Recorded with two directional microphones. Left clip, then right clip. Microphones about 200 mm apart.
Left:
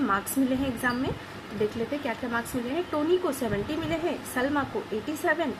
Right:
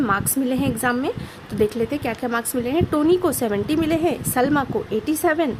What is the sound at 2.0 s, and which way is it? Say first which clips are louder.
A woman's voice: right 6 dB; 60° right (ahead or behind).